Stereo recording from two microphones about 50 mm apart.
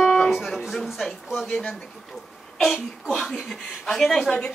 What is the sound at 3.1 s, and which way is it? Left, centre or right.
Speech, centre.